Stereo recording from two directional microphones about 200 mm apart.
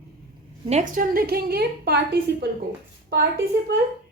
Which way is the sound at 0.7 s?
40° right (ahead or behind).